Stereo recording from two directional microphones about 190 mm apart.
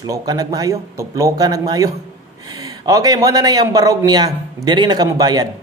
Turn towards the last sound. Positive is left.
turn(degrees=-20)  # may be behind; listen again after turning